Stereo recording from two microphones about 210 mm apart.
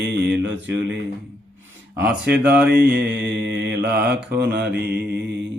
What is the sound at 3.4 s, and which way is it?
Mantra, 55° right (ahead or behind).